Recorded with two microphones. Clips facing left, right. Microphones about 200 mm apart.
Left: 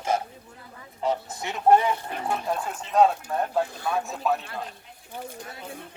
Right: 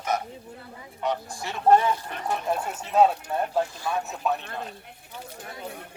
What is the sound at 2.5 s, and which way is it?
Speech, 5° right (ahead or behind).